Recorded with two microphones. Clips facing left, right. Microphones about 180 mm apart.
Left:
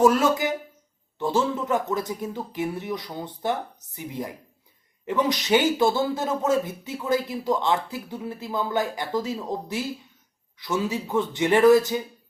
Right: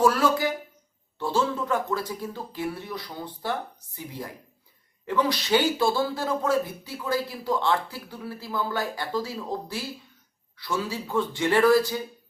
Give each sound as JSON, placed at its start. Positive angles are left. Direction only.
{"t": 0.0, "sound": "speech", "side_deg": 20}